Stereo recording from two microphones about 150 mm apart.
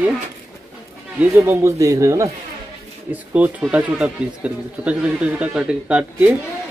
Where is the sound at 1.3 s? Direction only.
20° right (ahead or behind).